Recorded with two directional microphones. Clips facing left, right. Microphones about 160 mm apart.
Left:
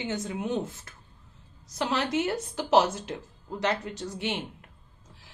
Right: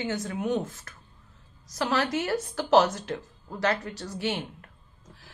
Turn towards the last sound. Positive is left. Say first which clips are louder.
# right 1 dB
turn(degrees=20)  # may be behind; listen again after turning